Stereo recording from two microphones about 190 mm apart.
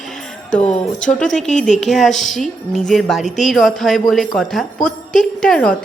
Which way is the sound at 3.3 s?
40° left (ahead or behind).